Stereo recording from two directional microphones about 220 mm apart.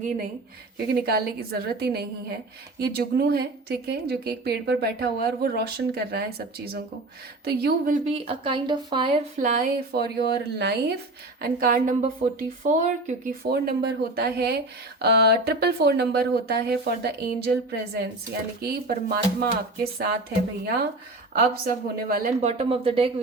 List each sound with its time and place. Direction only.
1.0 s a woman's voice: 45° right (ahead or behind)
7.4 s a woman's voice: 45° right (ahead or behind)
8.0 s speech: 25° right (ahead or behind)
9.4 s a woman's voice: 40° right (ahead or behind)
21.3 s a woman's voice: 40° right (ahead or behind)
22.4 s speech: 30° right (ahead or behind)